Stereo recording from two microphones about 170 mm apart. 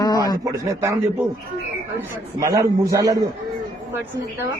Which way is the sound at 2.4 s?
20° right (ahead or behind).